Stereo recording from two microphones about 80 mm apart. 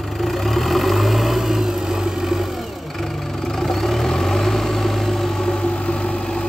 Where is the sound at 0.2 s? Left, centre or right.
Centre.